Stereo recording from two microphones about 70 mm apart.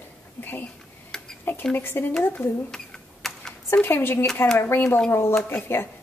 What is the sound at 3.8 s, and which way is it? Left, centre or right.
A woman's voice, left.